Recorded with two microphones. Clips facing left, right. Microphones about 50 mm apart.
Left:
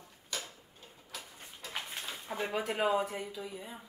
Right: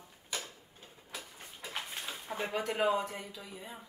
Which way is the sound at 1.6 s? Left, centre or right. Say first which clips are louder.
Even; centre.